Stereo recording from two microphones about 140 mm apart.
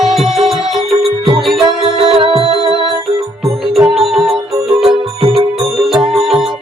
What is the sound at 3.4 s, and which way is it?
Music, centre (ahead or behind).